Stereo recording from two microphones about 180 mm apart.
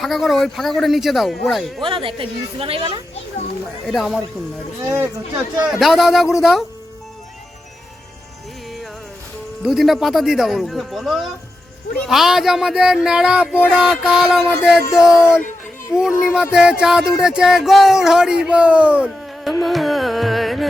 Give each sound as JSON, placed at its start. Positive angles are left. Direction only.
{"t": 0.0, "sound": "speech", "side_deg": 0}
{"t": 1.8, "sound": "a woman's voice", "side_deg": -30}
{"t": 3.8, "sound": "speech", "side_deg": 0}
{"t": 4.8, "sound": "speech", "side_deg": -15}
{"t": 5.6, "sound": "speech", "side_deg": -5}
{"t": 9.6, "sound": "speech", "side_deg": 0}